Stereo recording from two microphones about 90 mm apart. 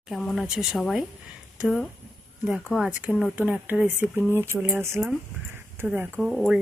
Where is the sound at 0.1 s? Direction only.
Centre (ahead or behind).